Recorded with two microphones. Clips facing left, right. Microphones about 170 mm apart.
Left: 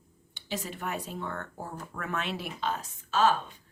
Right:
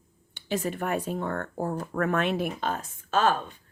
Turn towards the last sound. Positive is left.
turn(degrees=-50)  # may be behind; listen again after turning